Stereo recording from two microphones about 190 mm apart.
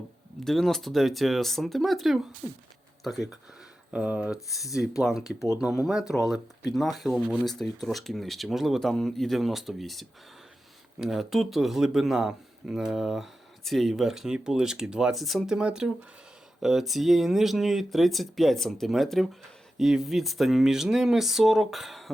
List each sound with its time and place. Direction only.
0.4 s speech: centre (ahead or behind)